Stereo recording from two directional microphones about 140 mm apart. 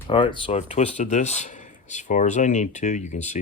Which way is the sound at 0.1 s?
35° left (ahead or behind).